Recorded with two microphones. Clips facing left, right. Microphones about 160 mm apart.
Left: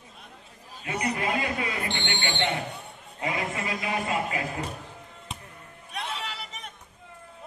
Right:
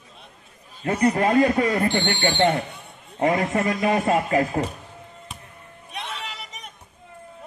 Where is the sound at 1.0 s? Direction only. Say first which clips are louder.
Right 11 dB; 50° right (ahead or behind).